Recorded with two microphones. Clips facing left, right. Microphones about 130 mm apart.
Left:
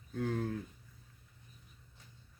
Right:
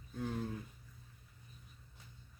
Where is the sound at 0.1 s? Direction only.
65° left (ahead or behind).